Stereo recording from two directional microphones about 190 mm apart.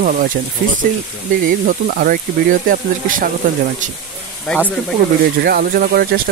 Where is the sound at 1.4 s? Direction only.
50° right (ahead or behind).